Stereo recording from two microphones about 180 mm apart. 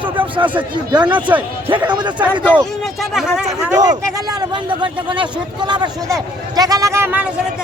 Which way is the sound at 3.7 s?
20° right (ahead or behind).